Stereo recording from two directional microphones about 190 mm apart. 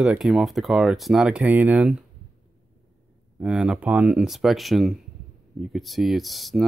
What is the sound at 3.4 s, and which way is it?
A man's voice, 5° right (ahead or behind).